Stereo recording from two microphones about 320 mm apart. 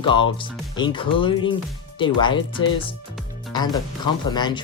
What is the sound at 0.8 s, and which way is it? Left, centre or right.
Speech, centre.